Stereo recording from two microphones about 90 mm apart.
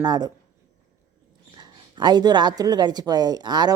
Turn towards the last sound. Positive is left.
turn(degrees=-50)  # may be behind; listen again after turning